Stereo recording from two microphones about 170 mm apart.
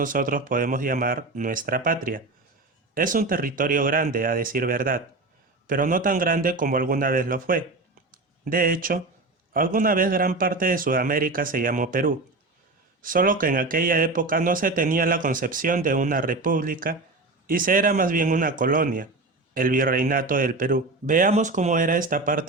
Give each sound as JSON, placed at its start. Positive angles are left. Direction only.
{"t": 0.0, "sound": "a man's voice", "side_deg": -55}
{"t": 8.1, "sound": "a sound", "side_deg": -55}
{"t": 9.5, "sound": "a man's voice", "side_deg": -55}